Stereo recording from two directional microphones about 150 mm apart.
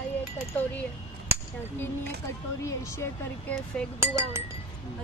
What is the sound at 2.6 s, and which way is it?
Speech, 20° left (ahead or behind).